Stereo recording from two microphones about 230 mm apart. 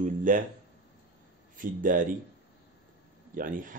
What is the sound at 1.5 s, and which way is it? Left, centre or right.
Speech, right.